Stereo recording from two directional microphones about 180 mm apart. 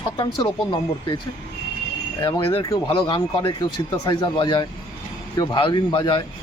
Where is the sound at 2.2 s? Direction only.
30° left (ahead or behind).